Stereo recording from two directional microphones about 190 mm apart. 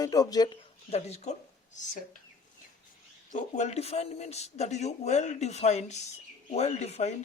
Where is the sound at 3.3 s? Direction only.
40° left (ahead or behind).